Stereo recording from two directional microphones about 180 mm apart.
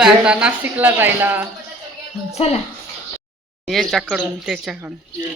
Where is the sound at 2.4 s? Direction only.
35° left (ahead or behind).